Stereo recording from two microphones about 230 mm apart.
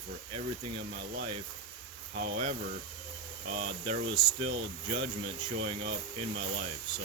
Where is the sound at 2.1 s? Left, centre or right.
Right.